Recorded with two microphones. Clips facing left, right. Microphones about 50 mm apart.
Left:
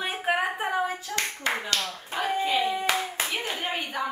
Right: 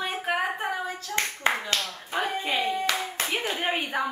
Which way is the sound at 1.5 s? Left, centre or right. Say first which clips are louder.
Right 3 dB; right.